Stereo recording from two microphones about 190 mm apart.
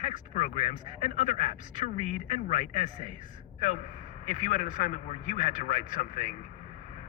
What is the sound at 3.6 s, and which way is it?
A man's voice, 40° left (ahead or behind).